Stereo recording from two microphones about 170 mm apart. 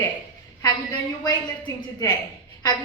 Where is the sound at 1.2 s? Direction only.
25° left (ahead or behind).